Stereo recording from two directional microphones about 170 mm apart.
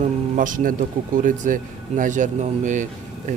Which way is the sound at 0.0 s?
50° right (ahead or behind).